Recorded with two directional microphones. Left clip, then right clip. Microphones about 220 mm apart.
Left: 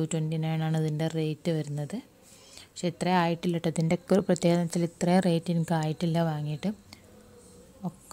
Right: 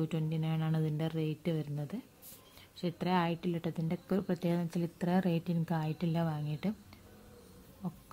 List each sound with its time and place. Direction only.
0.0 s a woman's voice: 15° left (ahead or behind)